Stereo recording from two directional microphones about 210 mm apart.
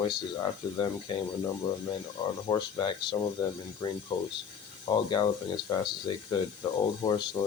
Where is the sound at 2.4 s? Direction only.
20° left (ahead or behind).